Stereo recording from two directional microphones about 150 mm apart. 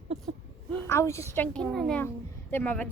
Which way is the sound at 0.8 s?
20° left (ahead or behind).